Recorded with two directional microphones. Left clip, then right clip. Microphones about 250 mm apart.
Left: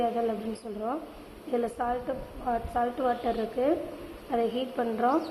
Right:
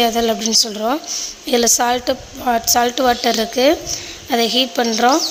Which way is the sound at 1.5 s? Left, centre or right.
Right.